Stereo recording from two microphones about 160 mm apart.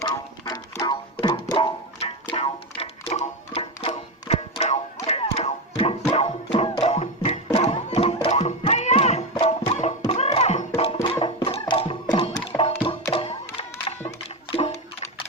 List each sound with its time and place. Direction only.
0.0 s music: 25° left (ahead or behind); by 9.9 s 45° left (ahead or behind)
10.1 s a sound: 40° left (ahead or behind)
10.8 s music: 35° left (ahead or behind)
14.5 s toilet flush: 45° left (ahead or behind)